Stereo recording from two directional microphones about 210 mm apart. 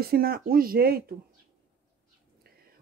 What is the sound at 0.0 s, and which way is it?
Speech, 45° right (ahead or behind).